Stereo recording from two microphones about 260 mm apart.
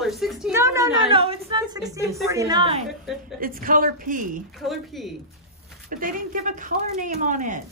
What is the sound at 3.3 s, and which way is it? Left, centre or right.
A woman's voice, right.